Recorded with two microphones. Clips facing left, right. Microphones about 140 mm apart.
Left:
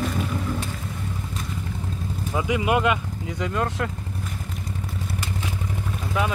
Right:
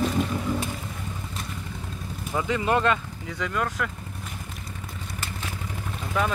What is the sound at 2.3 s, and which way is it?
Speech, 10° left (ahead or behind).